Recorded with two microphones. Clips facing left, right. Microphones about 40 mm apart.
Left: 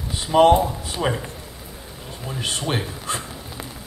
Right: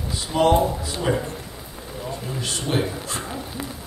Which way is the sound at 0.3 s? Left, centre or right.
Left.